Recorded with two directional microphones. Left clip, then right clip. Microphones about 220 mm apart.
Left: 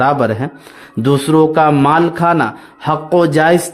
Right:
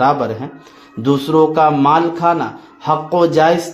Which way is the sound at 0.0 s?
45° left (ahead or behind).